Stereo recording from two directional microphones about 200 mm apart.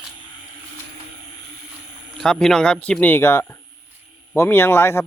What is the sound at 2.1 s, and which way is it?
Speech, centre (ahead or behind).